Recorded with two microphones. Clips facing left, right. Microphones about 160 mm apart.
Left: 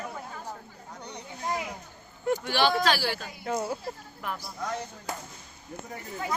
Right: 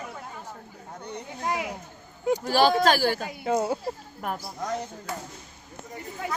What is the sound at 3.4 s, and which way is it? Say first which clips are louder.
Speech: right 5 dB; 25° right (ahead or behind).